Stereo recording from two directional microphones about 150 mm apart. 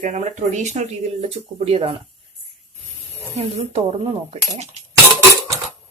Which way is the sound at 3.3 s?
45° right (ahead or behind).